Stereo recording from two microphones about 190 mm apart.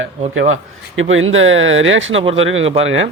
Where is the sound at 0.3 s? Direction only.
90° right.